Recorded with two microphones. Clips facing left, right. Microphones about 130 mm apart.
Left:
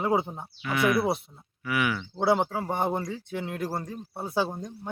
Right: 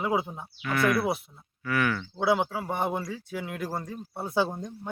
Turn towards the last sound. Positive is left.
turn(degrees=10)  # may be behind; listen again after turning